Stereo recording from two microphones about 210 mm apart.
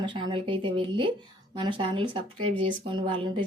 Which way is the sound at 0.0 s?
25° right (ahead or behind).